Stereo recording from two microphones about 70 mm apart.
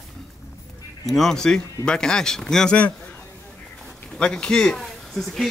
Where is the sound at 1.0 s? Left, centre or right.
Centre.